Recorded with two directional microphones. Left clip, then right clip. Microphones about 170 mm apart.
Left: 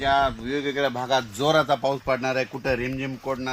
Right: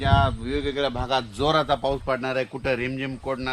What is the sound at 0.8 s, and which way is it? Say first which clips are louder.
Speech: left 2 dB; 50° left (ahead or behind).